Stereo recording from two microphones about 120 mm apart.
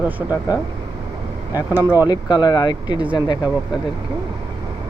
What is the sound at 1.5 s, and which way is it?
Speech, 30° left (ahead or behind).